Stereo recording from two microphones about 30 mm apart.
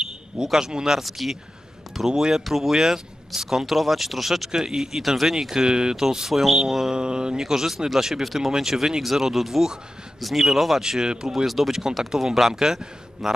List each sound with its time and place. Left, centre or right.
0.3 s speech: right
1.0 s speech: centre
2.0 s speech: centre
2.4 s speech: centre
2.7 s speech: centre
6.2 s speech: centre
6.9 s speech: right
7.3 s speech: centre
8.5 s speech: centre
10.8 s speech: right
11.4 s speech: centre
12.0 s speech: centre
13.2 s speech: centre